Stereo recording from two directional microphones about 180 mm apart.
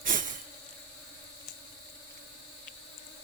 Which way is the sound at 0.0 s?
50° right (ahead or behind).